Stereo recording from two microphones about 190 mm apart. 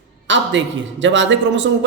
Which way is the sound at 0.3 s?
75° right (ahead or behind).